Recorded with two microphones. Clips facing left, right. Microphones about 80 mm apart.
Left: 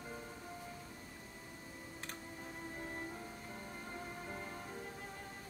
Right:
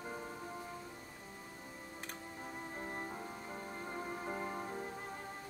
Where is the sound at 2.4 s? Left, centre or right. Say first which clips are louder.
Right 3 dB; right.